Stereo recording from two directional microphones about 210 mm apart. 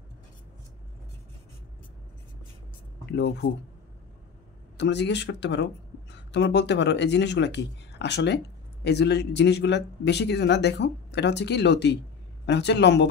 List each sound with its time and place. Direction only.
3.1 s speech: 55° left (ahead or behind)
4.7 s speech: 55° left (ahead or behind)